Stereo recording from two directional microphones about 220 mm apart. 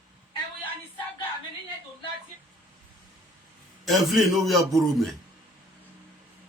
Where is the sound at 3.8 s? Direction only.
Centre (ahead or behind).